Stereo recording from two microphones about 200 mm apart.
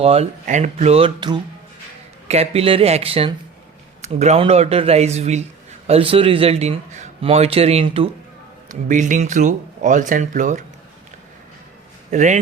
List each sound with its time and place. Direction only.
0.0 s a man's voice: 30° right (ahead or behind)
12.1 s speech: 35° right (ahead or behind)